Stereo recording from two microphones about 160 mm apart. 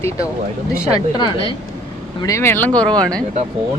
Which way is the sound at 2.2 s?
20° left (ahead or behind).